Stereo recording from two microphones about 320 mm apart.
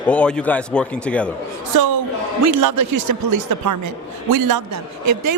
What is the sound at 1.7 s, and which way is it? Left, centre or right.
A man's voice, right.